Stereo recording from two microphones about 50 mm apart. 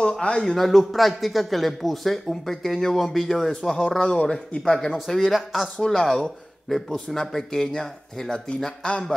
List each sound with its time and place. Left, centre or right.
0.2 s a man's voice: centre